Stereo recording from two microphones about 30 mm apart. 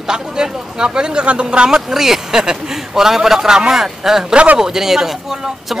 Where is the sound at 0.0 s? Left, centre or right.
Right.